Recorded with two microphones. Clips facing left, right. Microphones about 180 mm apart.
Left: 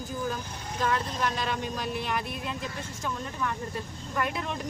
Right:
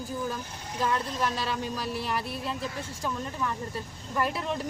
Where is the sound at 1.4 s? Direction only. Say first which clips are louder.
Even; 35° right (ahead or behind).